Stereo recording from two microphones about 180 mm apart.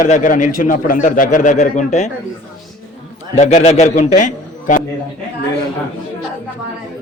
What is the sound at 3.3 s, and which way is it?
A man's voice, 40° left (ahead or behind).